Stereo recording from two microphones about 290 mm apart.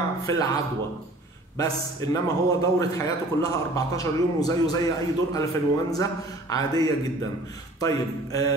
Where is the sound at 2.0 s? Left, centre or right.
Centre.